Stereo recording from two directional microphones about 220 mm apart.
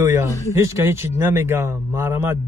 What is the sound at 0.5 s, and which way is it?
Speech, 10° right (ahead or behind).